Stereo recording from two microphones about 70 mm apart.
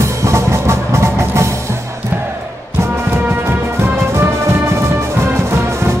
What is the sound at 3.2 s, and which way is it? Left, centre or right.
Music, right.